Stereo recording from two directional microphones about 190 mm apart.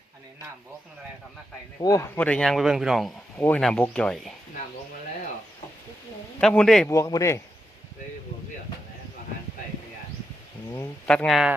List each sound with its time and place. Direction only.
1.8 s speech: 15° left (ahead or behind)
6.4 s speech: 5° left (ahead or behind)
6.8 s speech: 15° left (ahead or behind)
11.0 s speech: 5° left (ahead or behind)